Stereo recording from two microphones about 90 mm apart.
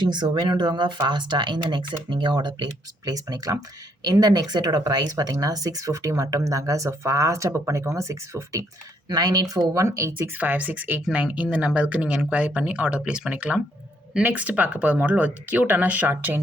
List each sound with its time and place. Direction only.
0.0 s speech: 55° right (ahead or behind)
3.1 s speech: 45° right (ahead or behind)
9.0 s speech: 50° right (ahead or behind)
10.2 s speech: 20° right (ahead or behind)